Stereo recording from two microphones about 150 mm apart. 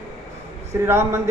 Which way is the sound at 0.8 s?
15° right (ahead or behind).